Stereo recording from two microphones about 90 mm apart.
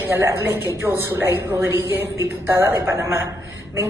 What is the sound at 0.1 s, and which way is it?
A woman's voice, 30° right (ahead or behind).